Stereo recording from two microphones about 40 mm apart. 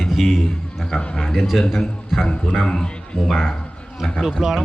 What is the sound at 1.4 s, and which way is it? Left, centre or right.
Speech, centre.